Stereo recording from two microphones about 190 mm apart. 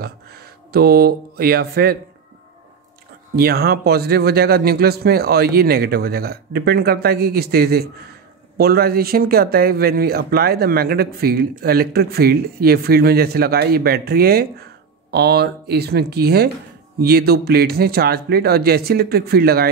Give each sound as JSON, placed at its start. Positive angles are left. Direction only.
{"t": 0.0, "sound": "speech", "side_deg": -55}
{"t": 3.3, "sound": "speech", "side_deg": -55}